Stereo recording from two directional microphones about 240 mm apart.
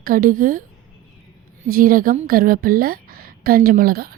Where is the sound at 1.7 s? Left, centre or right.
Right.